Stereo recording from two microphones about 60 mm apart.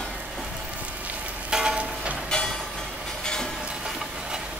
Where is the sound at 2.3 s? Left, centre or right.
Centre.